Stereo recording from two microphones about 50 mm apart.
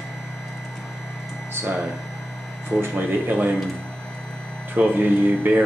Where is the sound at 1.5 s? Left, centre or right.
Right.